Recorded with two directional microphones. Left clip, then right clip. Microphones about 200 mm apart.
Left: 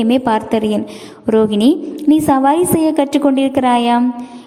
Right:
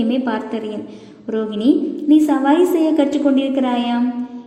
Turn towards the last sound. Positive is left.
turn(degrees=30)  # may be behind; listen again after turning